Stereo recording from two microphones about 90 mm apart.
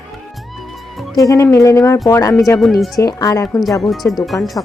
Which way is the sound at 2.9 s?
45° left (ahead or behind).